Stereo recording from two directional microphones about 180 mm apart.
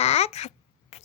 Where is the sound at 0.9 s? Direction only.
40° left (ahead or behind).